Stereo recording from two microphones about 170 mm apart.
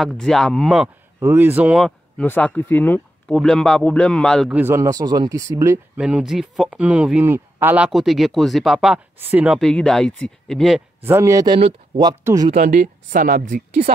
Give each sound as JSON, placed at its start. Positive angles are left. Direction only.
{"t": 0.0, "sound": "speech", "side_deg": 0}
{"t": 1.2, "sound": "speech", "side_deg": -10}
{"t": 2.2, "sound": "a man's voice", "side_deg": 10}
{"t": 4.5, "sound": "speech", "side_deg": -10}
{"t": 5.9, "sound": "speech", "side_deg": -5}
{"t": 9.6, "sound": "speech", "side_deg": 5}
{"t": 11.0, "sound": "speech", "side_deg": -15}
{"t": 12.1, "sound": "speech", "side_deg": -20}
{"t": 12.5, "sound": "speech", "side_deg": -50}